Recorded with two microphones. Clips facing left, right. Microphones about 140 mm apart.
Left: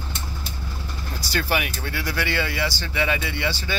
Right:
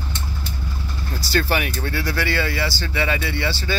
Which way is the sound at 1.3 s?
15° left (ahead or behind).